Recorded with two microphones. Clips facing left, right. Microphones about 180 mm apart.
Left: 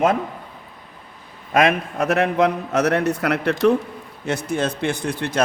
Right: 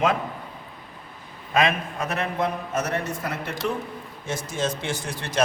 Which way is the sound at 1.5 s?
65° left (ahead or behind).